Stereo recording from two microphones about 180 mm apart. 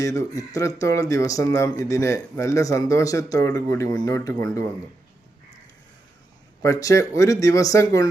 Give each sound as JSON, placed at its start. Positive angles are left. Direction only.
{"t": 0.0, "sound": "speech", "side_deg": 15}
{"t": 6.6, "sound": "speech", "side_deg": 20}